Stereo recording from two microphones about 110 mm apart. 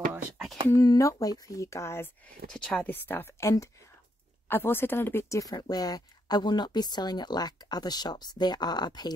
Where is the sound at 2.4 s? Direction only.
5° left (ahead or behind).